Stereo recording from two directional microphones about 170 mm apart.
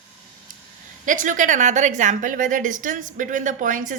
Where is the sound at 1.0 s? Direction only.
50° right (ahead or behind).